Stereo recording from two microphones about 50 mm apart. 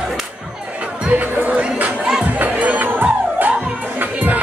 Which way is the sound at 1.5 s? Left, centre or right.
Right.